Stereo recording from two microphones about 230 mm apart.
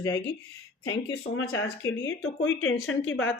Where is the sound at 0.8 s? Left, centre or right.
Left.